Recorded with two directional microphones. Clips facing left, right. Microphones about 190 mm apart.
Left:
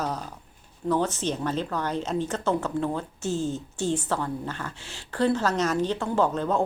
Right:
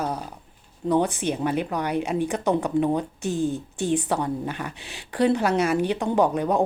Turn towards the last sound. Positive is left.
turn(degrees=-15)  # may be behind; listen again after turning